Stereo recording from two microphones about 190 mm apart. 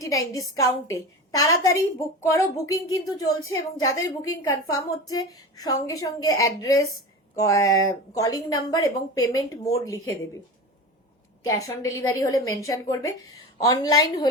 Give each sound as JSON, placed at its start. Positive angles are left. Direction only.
{"t": 0.0, "sound": "a woman's voice", "side_deg": 15}
{"t": 11.4, "sound": "a woman's voice", "side_deg": 15}